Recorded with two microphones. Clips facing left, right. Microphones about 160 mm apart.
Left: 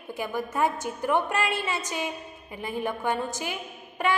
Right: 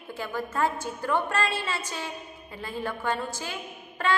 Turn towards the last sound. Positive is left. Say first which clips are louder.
# left 1 dB
turn(degrees=15)  # may be behind; listen again after turning